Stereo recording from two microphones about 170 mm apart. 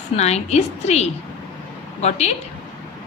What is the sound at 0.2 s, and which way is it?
A woman's voice, 40° left (ahead or behind).